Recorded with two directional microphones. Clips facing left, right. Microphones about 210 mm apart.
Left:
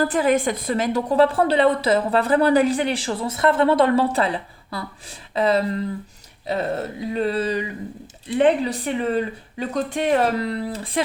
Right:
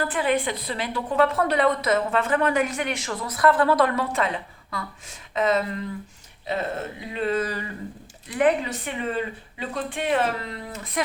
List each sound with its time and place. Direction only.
0.0 s a woman's voice: 40° left (ahead or behind)